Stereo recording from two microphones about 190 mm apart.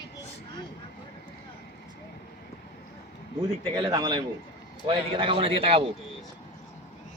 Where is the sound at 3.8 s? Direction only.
25° right (ahead or behind).